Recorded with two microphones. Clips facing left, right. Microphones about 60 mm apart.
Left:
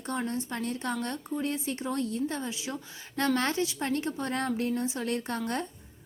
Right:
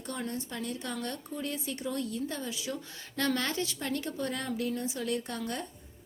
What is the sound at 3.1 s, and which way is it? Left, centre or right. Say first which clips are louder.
Speech: left 3 dB; left.